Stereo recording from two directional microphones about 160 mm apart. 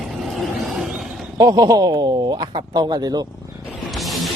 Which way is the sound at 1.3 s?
25° right (ahead or behind).